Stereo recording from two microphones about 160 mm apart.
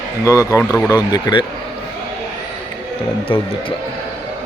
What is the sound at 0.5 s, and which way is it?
Speech, 10° left (ahead or behind).